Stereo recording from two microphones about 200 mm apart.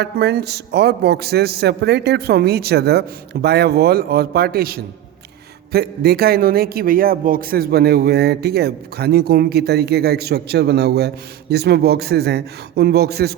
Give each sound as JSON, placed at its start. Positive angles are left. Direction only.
{"t": 0.0, "sound": "a man's voice", "side_deg": -55}